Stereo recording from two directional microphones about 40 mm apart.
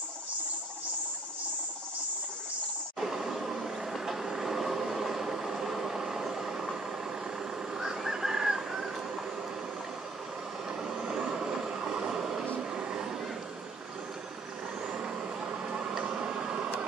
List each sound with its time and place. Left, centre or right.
3.0 s vehicle: centre
7.7 s fowl: centre
10.8 s vehicle: centre
12.7 s a sound: right
14.8 s vehicle: right
16.0 s a sound: right